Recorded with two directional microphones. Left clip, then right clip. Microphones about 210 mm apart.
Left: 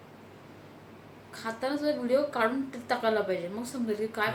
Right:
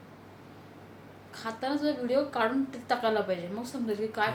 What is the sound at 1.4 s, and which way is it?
A woman's voice, 5° left (ahead or behind).